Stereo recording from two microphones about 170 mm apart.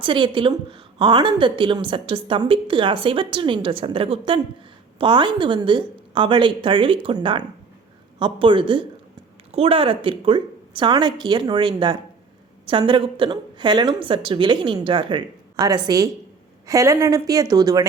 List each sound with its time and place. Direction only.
0.0 s a woman's voice: 30° right (ahead or behind)